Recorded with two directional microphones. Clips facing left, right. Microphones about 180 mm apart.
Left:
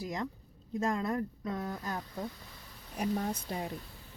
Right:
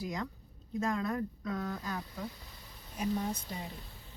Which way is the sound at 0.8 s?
30° left (ahead or behind).